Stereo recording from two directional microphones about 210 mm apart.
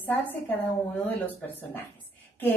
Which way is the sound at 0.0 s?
10° left (ahead or behind).